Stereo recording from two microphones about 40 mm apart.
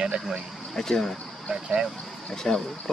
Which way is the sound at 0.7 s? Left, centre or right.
Centre.